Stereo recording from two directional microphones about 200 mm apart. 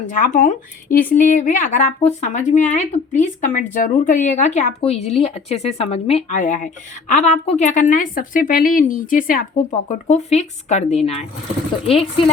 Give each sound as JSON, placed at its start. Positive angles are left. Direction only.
{"t": 0.0, "sound": "speech", "side_deg": 40}